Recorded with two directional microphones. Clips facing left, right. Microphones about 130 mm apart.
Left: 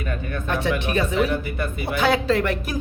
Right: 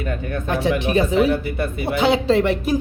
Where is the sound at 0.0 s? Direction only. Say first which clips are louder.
Right 3 dB; 30° right (ahead or behind).